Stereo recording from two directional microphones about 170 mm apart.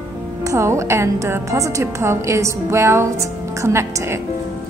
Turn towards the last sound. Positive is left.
turn(degrees=-15)  # may be behind; listen again after turning